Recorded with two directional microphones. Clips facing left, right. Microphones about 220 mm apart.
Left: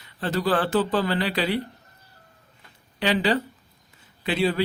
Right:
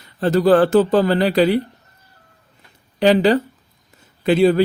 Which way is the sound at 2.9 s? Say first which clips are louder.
Right 9 dB; 45° right (ahead or behind).